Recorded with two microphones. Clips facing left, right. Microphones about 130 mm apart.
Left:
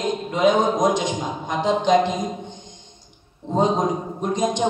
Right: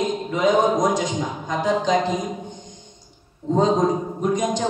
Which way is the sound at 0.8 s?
20° left (ahead or behind).